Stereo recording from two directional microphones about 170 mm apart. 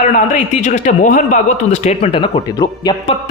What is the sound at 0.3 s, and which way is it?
A man's voice, 45° left (ahead or behind).